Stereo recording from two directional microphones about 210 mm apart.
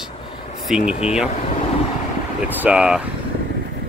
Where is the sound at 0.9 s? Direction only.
30° left (ahead or behind).